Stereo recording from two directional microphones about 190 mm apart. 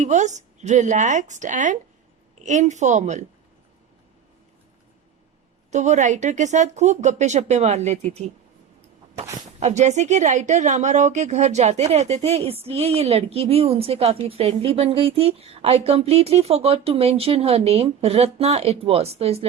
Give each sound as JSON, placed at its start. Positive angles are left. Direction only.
{"t": 0.0, "sound": "speech", "side_deg": -40}
{"t": 5.7, "sound": "speech", "side_deg": -40}
{"t": 9.6, "sound": "speech", "side_deg": -35}